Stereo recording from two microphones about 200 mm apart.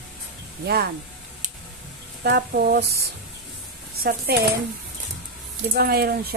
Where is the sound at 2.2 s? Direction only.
50° right (ahead or behind).